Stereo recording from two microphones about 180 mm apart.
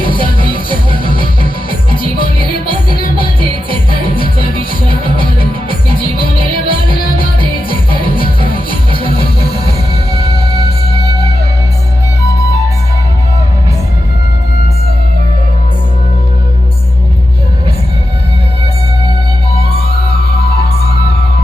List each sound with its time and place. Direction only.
0.3 s music: 25° left (ahead or behind)
2.6 s music: 55° left (ahead or behind)
5.1 s music: 55° left (ahead or behind)
8.4 s music: 50° left (ahead or behind)
10.2 s music: 35° left (ahead or behind)